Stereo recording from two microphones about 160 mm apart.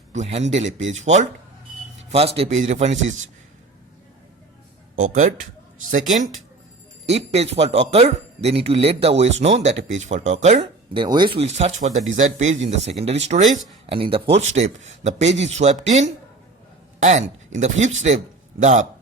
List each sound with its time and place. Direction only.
0.1 s speech: 45° right (ahead or behind)
4.9 s speech: 55° right (ahead or behind)
7.0 s speech: 40° right (ahead or behind)
10.6 s speech: 30° right (ahead or behind)